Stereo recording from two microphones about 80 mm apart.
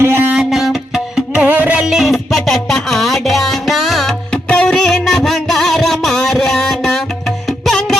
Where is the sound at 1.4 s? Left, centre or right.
Centre.